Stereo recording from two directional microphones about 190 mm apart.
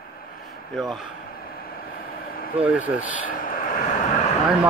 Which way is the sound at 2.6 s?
10° right (ahead or behind).